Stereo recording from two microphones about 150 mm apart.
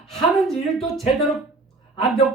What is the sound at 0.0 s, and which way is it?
A woman's voice, 5° left (ahead or behind).